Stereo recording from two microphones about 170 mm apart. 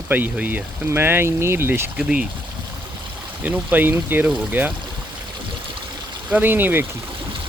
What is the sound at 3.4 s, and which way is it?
Speech, 10° right (ahead or behind).